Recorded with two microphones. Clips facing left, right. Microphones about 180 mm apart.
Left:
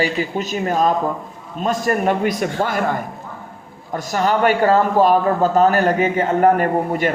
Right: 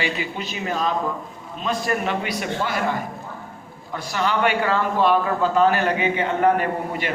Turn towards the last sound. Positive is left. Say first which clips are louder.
# left 7 dB
turn(degrees=45)  # may be behind; listen again after turning